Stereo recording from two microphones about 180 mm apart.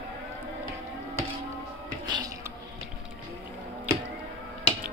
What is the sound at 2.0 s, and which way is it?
Music, 20° right (ahead or behind).